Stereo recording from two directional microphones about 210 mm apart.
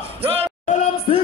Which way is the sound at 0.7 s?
30° left (ahead or behind).